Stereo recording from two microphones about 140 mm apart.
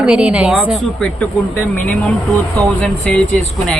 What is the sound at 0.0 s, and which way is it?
Speech, 10° right (ahead or behind).